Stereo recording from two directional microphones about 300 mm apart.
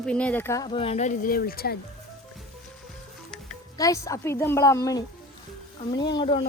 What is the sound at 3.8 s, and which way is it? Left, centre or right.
A woman's voice, centre.